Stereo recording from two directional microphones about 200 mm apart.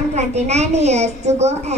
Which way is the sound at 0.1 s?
35° right (ahead or behind).